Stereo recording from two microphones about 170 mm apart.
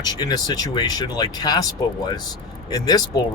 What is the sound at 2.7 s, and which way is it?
Speech, 20° left (ahead or behind).